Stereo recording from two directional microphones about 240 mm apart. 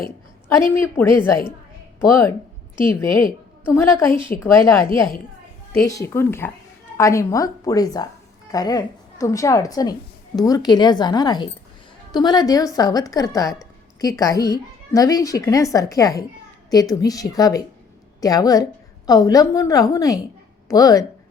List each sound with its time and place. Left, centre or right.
0.4 s a woman's voice: centre